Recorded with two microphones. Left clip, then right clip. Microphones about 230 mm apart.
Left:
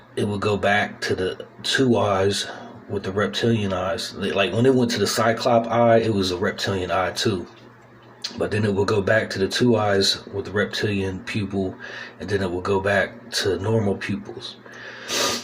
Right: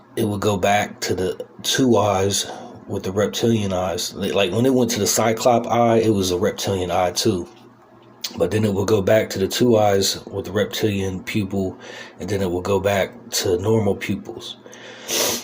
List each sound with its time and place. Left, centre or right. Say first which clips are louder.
0.2 s speech: right 2 dB; right
8.4 s speech: right 2 dB; right